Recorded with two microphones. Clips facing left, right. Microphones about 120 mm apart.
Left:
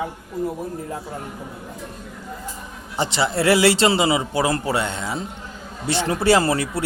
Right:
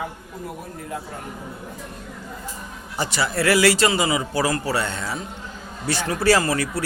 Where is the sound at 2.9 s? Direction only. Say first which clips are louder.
Left 2 dB; 25° left (ahead or behind).